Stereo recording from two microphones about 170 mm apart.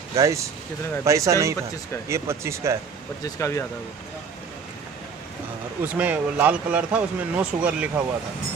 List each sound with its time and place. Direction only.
0.1 s speech: 20° right (ahead or behind)
3.3 s speech: 15° left (ahead or behind)
5.9 s speech: 10° right (ahead or behind)